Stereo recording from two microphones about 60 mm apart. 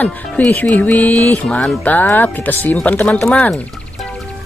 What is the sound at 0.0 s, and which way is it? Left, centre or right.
Speech, left.